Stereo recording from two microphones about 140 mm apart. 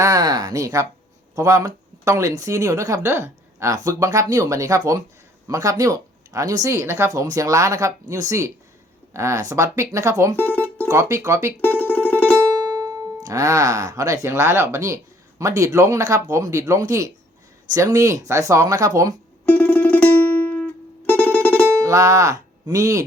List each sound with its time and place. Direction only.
0.0 s speech: 25° right (ahead or behind)
10.3 s music: 10° left (ahead or behind)
10.8 s speech: 20° right (ahead or behind)
11.6 s music: 10° left (ahead or behind)
13.1 s speech: 25° right (ahead or behind)
19.5 s music: 10° left (ahead or behind)
21.8 s speech: 20° right (ahead or behind)